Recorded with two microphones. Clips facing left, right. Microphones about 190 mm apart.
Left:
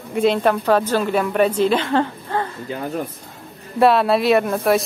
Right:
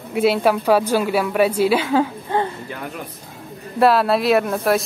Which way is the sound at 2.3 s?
15° right (ahead or behind).